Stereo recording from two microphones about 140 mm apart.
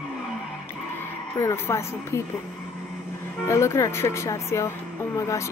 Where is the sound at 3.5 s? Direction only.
20° left (ahead or behind).